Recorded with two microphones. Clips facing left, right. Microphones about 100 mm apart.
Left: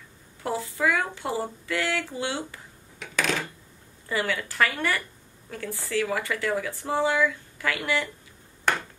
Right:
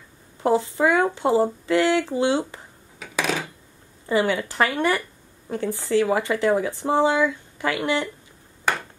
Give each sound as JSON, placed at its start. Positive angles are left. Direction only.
{"t": 0.4, "sound": "speech", "side_deg": -25}
{"t": 3.0, "sound": "coin", "side_deg": -10}
{"t": 4.1, "sound": "speech", "side_deg": -25}